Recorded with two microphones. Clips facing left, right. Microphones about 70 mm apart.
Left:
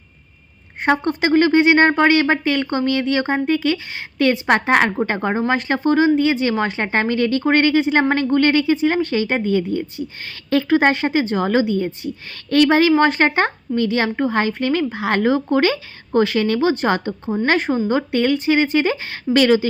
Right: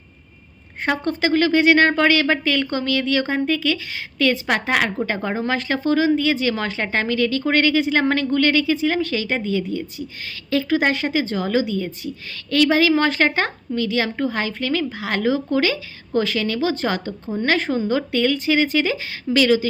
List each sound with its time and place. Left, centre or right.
0.9 s a woman's voice: left